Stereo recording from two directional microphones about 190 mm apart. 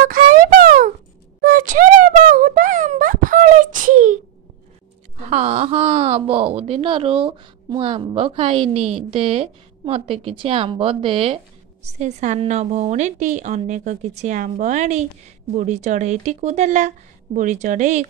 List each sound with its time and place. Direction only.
0.0 s music: 45° right (ahead or behind)
1.4 s a sound: 45° right (ahead or behind)
5.1 s speech: 40° right (ahead or behind)
11.8 s a woman's voice: 40° right (ahead or behind)